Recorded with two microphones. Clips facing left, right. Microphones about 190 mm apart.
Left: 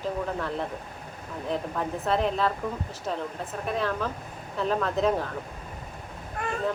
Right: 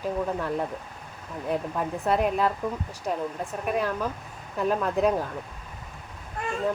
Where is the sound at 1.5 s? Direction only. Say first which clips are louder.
Right 2 dB; 10° right (ahead or behind).